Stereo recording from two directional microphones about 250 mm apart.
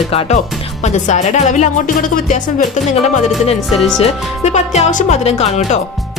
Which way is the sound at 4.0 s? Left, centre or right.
Left.